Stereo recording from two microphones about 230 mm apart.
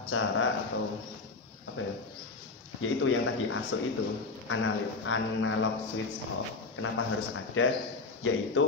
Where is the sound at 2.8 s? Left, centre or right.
Left.